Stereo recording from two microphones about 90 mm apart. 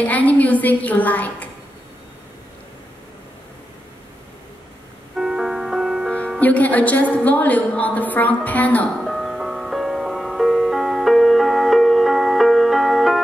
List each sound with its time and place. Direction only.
0.0 s a woman's voice: 15° left (ahead or behind)
5.1 s music: 5° right (ahead or behind)
6.4 s a woman's voice: 15° left (ahead or behind)
9.0 s music: 5° right (ahead or behind)